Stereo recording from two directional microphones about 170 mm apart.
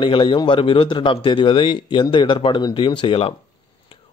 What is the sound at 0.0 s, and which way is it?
Speech, 30° left (ahead or behind).